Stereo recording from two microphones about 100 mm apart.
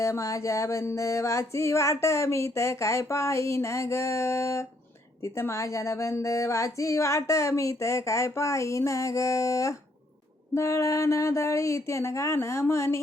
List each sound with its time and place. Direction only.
0.0 s music: 30° left (ahead or behind)
5.2 s a woman's voice: 25° left (ahead or behind)
10.5 s music: 30° left (ahead or behind)